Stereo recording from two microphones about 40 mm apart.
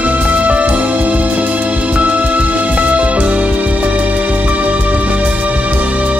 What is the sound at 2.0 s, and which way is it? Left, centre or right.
Music, right.